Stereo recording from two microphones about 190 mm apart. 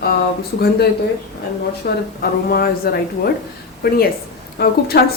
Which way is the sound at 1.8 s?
55° left (ahead or behind).